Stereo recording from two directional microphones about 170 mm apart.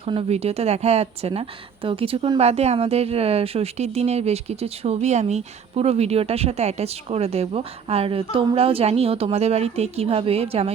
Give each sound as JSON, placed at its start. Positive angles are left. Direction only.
{"t": 0.0, "sound": "a woman's voice", "side_deg": -35}